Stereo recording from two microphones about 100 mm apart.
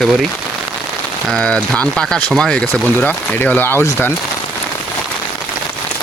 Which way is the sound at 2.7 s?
20° left (ahead or behind).